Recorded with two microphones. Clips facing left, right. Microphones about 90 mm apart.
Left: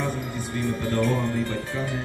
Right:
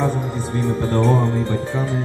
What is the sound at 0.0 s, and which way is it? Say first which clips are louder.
Music: right 7 dB; 30° right (ahead or behind).